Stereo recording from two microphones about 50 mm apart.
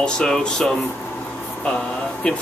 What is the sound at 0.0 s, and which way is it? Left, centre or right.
Speech, centre.